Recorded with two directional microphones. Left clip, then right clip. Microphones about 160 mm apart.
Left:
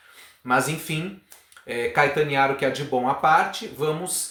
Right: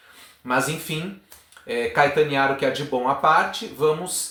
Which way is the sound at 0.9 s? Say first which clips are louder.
Even; 25° left (ahead or behind).